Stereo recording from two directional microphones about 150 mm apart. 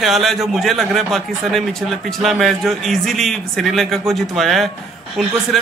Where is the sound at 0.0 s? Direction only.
Centre (ahead or behind).